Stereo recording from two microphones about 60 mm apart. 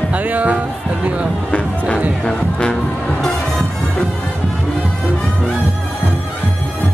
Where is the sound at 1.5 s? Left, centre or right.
Centre.